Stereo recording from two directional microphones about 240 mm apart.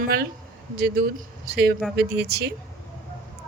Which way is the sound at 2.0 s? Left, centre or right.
Right.